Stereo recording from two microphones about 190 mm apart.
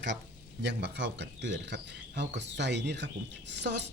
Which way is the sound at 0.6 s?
65° right (ahead or behind).